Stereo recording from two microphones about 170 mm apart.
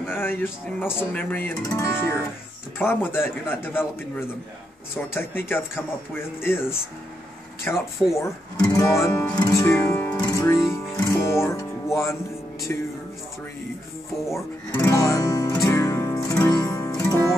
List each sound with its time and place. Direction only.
0.0 s speech: 15° left (ahead or behind)
5.1 s speech: 15° left (ahead or behind)
10.3 s music: 15° left (ahead or behind)
14.3 s music: 15° left (ahead or behind)